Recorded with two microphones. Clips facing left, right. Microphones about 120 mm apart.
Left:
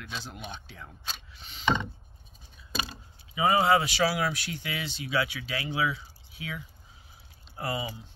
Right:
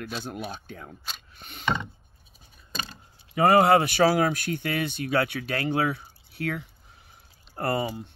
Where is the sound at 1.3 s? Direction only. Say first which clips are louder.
Right 4 dB; 55° right (ahead or behind).